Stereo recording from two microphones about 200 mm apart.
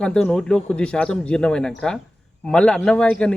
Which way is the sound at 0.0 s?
5° left (ahead or behind).